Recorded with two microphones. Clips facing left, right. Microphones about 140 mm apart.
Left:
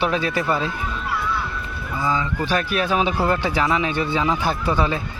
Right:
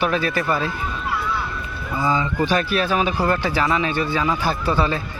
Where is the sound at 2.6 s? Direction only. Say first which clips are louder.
Even; 20° left (ahead or behind).